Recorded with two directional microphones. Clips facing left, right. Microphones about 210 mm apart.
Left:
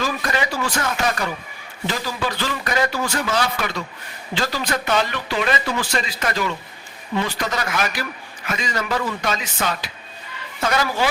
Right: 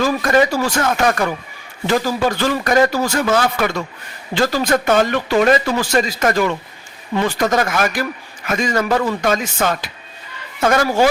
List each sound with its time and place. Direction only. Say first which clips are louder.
0.0 s speech: right 9 dB; 45° right (ahead or behind)